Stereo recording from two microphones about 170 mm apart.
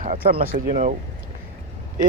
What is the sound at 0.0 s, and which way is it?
Speech, 55° right (ahead or behind).